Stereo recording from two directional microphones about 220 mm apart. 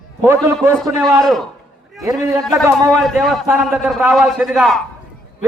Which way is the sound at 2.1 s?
15° right (ahead or behind).